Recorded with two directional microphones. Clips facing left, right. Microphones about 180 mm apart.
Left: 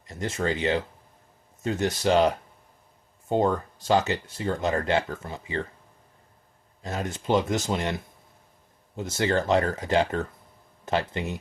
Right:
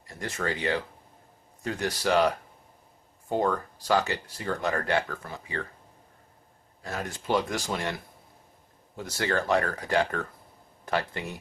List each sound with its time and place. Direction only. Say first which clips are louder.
0.1 s speech: left 4 dB; 20° left (ahead or behind)
6.8 s speech: left 3 dB; 20° left (ahead or behind)